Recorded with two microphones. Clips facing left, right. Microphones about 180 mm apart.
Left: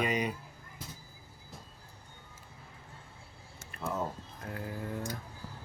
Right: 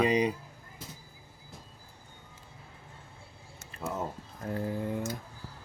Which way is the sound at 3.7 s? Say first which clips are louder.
Even; 25° right (ahead or behind).